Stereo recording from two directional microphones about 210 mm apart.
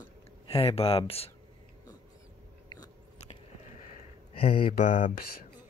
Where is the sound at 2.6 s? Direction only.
25° left (ahead or behind).